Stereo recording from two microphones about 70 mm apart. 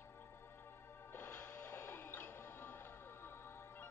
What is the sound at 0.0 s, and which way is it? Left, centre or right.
Music, left.